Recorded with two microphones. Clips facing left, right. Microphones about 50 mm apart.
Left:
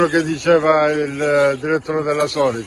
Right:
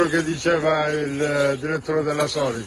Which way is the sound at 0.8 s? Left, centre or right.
Left.